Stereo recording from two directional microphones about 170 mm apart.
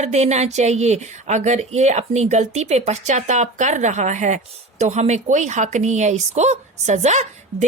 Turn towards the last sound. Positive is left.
turn(degrees=-40)  # may be behind; listen again after turning